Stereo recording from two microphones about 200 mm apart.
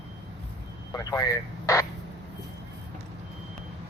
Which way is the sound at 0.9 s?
15° left (ahead or behind).